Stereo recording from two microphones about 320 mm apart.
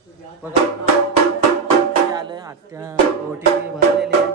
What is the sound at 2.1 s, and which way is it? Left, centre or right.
Speech, centre.